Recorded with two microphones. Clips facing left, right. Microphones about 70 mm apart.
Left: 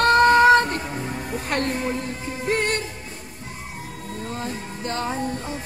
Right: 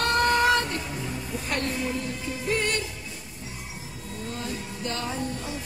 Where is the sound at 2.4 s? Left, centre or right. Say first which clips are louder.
Left 4 dB; left.